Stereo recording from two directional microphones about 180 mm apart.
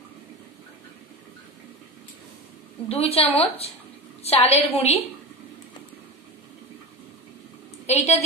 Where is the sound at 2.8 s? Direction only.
35° left (ahead or behind).